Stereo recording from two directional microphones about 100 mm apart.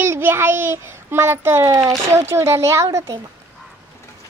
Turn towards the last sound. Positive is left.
turn(degrees=-30)  # may be behind; listen again after turning